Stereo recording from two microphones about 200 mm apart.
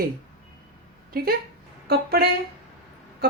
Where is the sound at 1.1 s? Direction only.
50° right (ahead or behind).